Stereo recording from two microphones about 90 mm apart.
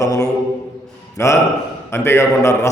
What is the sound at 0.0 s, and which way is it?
A man's voice, 35° left (ahead or behind).